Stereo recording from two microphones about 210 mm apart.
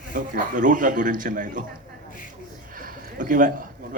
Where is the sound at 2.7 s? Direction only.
40° right (ahead or behind).